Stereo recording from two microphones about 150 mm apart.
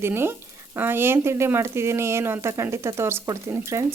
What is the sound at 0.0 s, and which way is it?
Speech, 15° right (ahead or behind).